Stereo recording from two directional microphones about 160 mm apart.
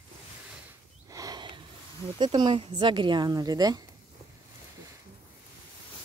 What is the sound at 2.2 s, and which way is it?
Speech, 30° right (ahead or behind).